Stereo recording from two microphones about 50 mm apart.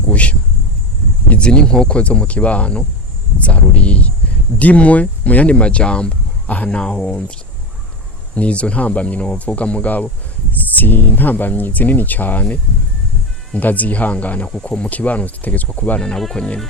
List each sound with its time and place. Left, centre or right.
0.1 s a sound: left
1.3 s speech: centre
8.4 s speech: left
13.6 s speech: left
16.0 s speech: centre